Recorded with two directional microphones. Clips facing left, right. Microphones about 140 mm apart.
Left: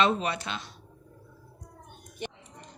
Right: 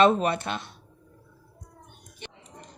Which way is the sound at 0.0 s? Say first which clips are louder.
Right 5 dB; 50° right (ahead or behind).